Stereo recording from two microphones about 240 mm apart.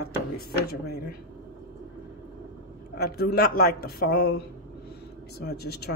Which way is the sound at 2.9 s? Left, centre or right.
Left.